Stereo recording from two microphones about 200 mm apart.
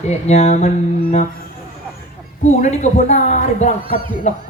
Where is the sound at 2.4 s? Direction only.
35° left (ahead or behind).